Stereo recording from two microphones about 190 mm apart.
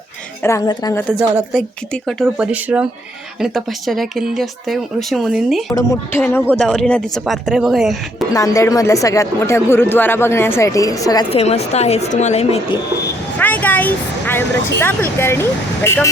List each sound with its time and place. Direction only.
0.4 s speech: 15° left (ahead or behind)
1.1 s speech: centre (ahead or behind)
5.7 s speech: 15° left (ahead or behind); by 7.9 s centre (ahead or behind)
8.3 s speech: 15° left (ahead or behind)
11.3 s a woman's voice: 35° left (ahead or behind)
13.4 s speech: 10° left (ahead or behind)